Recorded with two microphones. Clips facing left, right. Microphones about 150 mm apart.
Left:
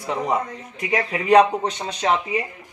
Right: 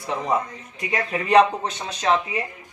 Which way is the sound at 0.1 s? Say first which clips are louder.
Left 1 dB; 15° left (ahead or behind).